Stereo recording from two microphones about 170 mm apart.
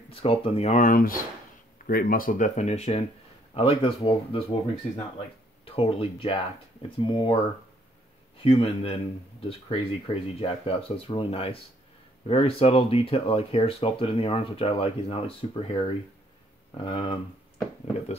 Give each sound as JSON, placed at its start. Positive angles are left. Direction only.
{"t": 0.1, "sound": "speech", "side_deg": 35}
{"t": 8.4, "sound": "speech", "side_deg": 35}